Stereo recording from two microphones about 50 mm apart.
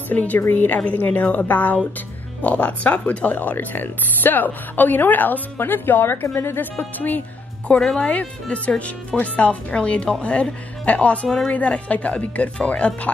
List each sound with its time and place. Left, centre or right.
0.1 s speech: left
0.7 s speech: left
3.3 s speech: left
6.2 s a woman's voice: left
6.8 s speech: left
8.0 s speech: left